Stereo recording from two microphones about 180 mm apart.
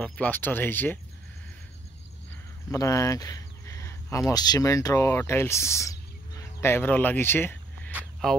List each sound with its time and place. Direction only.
0.0 s speech: 10° left (ahead or behind)
2.7 s a sound: 20° left (ahead or behind)
4.3 s speech: 20° left (ahead or behind); by 8.4 s 5° left (ahead or behind)